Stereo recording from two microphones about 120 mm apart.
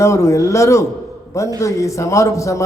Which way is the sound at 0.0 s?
25° left (ahead or behind).